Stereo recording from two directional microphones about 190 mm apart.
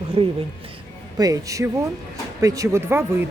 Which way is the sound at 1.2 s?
15° right (ahead or behind).